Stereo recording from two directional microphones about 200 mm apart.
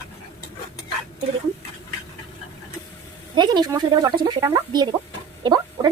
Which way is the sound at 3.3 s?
20° right (ahead or behind).